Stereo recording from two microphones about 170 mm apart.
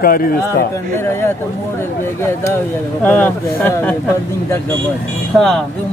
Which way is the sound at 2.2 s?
15° left (ahead or behind).